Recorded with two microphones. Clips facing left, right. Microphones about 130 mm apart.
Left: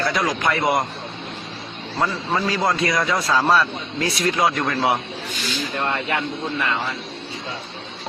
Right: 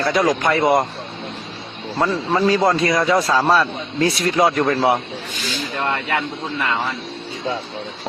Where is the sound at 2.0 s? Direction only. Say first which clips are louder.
Right 4 dB; 30° right (ahead or behind).